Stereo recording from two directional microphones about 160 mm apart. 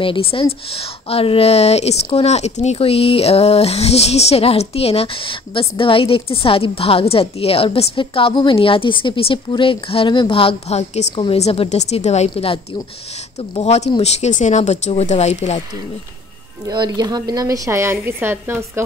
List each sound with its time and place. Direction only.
0.0 s a woman's voice: 35° left (ahead or behind)
13.6 s speech: 45° left (ahead or behind)
16.6 s a woman's voice: 25° right (ahead or behind)